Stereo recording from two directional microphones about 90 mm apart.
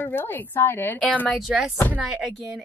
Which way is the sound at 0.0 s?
20° left (ahead or behind).